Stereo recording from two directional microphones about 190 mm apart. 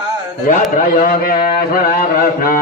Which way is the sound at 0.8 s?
45° left (ahead or behind).